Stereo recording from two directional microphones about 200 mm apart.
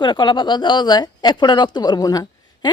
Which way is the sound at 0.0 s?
25° left (ahead or behind).